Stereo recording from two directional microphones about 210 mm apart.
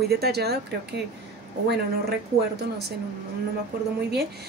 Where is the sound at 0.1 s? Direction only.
50° right (ahead or behind).